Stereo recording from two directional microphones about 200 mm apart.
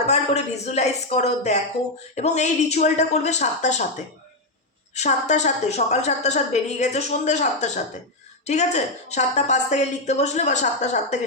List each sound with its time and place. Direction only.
0.0 s a woman's voice: 35° left (ahead or behind)